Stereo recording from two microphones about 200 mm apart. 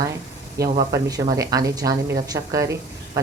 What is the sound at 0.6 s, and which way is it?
Speech, 50° right (ahead or behind).